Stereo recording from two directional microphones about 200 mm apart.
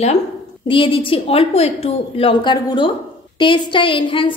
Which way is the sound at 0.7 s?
25° left (ahead or behind).